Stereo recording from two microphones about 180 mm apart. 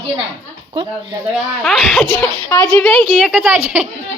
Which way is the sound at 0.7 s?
25° right (ahead or behind).